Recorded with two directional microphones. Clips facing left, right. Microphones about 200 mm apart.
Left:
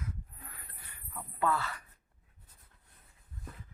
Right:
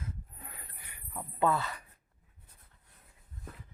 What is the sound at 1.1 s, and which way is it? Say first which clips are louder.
Speech: right 3 dB; 20° right (ahead or behind).